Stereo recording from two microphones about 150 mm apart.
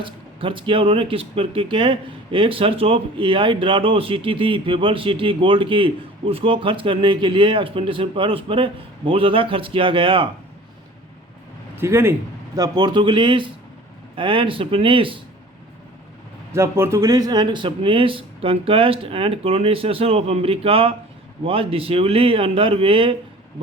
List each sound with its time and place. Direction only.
0.0 s speech: 35° right (ahead or behind)
11.8 s speech: 15° right (ahead or behind); by 15.2 s 35° right (ahead or behind)
16.5 s speech: 15° right (ahead or behind); by 23.1 s 35° right (ahead or behind)